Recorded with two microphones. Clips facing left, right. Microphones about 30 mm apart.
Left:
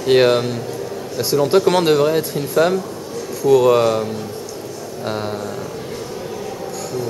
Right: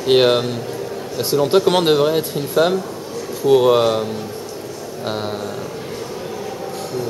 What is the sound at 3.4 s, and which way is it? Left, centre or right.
Speech, right.